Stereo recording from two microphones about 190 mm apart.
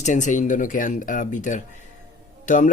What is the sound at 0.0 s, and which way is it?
Speech, 40° left (ahead or behind).